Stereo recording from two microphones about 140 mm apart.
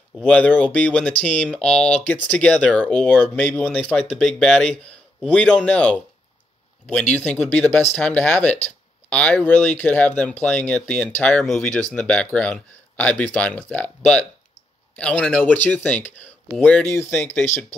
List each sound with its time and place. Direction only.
0.2 s speech: 10° left (ahead or behind)